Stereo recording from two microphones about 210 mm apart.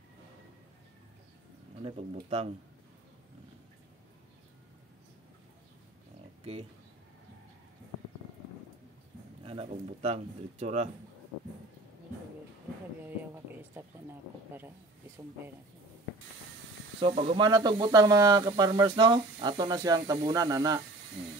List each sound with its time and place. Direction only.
1.8 s speech: 25° right (ahead or behind)
9.4 s speech: 25° right (ahead or behind)
13.0 s a sound: 10° right (ahead or behind)
17.0 s speech: 25° right (ahead or behind)